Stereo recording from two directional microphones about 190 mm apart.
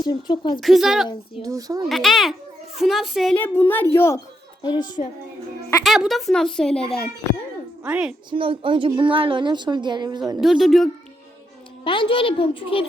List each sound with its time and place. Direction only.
0.0 s a woman's voice: 25° left (ahead or behind)
0.6 s a woman's voice: centre (ahead or behind)
1.5 s a woman's voice: 20° right (ahead or behind)
1.9 s a woman's voice: centre (ahead or behind)
3.3 s a woman's voice: 10° left (ahead or behind)
4.6 s a woman's voice: 25° left (ahead or behind)
5.8 s a woman's voice: centre (ahead or behind)
7.9 s a woman's voice: 5° right (ahead or behind)
8.3 s a woman's voice: 25° right (ahead or behind)
10.4 s a woman's voice: centre (ahead or behind)
11.9 s a woman's voice: 25° left (ahead or behind)